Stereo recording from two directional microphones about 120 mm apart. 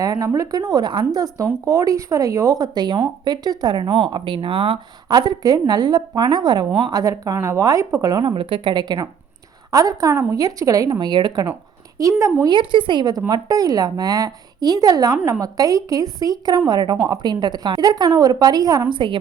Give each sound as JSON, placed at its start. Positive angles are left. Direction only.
{"t": 0.0, "sound": "a woman's voice", "side_deg": -30}
{"t": 8.3, "sound": "a woman's voice", "side_deg": -45}
{"t": 12.5, "sound": "a woman's voice", "side_deg": -40}
{"t": 18.9, "sound": "a woman's voice", "side_deg": -45}